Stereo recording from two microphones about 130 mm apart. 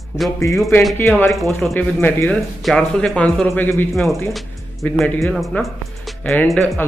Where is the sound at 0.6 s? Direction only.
20° left (ahead or behind).